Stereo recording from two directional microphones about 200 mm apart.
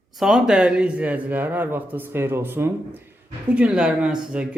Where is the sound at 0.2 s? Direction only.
Centre (ahead or behind).